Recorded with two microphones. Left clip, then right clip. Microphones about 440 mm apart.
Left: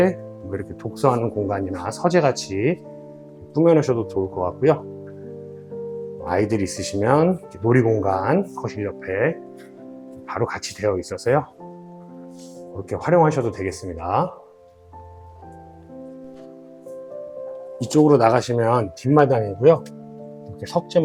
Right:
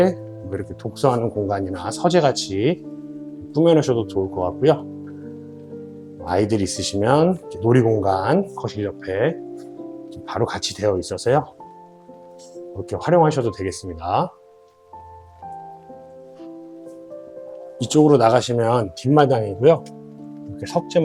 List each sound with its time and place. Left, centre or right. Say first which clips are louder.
0.0 s speech: right 1 dB; centre
6.2 s speech: right 2 dB; centre
12.9 s speech: right 1 dB; centre
17.7 s speech: right 1 dB; centre